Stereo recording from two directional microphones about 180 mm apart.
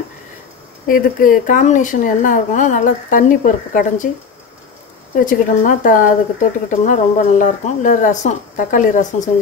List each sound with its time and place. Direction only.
0.8 s speech: 50° left (ahead or behind)
5.2 s speech: 45° left (ahead or behind)